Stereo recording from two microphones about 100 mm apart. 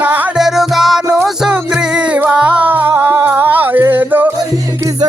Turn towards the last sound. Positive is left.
turn(degrees=-20)  # may be behind; listen again after turning